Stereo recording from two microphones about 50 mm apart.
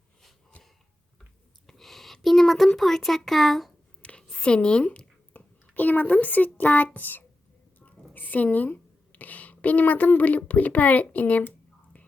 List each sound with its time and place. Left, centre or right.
1.6 s a sound: centre
2.7 s speech: centre
4.2 s a woman's voice: centre
4.9 s a woman's voice: left